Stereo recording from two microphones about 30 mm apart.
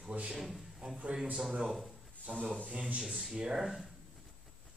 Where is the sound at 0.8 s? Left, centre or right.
Right.